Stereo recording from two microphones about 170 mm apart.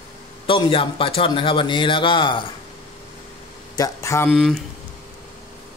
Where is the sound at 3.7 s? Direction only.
20° left (ahead or behind).